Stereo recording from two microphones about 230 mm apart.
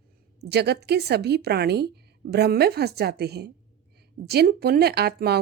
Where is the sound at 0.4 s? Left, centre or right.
Right.